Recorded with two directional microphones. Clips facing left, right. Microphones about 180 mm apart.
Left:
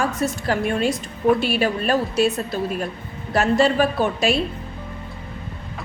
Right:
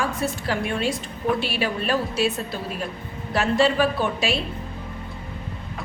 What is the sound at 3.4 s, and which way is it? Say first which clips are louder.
A woman's voice: left 2 dB; 45° left (ahead or behind).